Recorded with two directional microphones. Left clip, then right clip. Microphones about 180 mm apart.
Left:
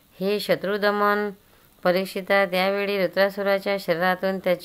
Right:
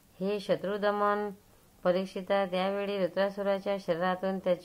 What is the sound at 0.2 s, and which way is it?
Speech, 20° left (ahead or behind).